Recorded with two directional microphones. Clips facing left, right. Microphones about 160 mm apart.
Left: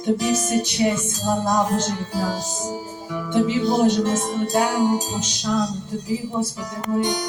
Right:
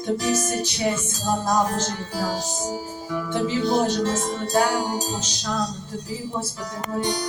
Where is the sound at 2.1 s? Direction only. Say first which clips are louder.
Right 2 dB; 20° left (ahead or behind).